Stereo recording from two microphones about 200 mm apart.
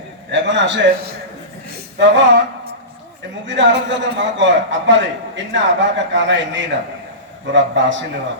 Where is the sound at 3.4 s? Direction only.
65° right (ahead or behind).